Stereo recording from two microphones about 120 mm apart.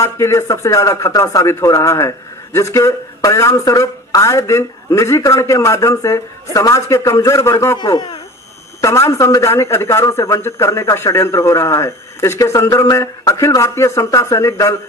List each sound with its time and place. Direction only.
0.0 s speech: 25° left (ahead or behind)
7.8 s speech: 35° left (ahead or behind)
8.8 s speech: 25° left (ahead or behind)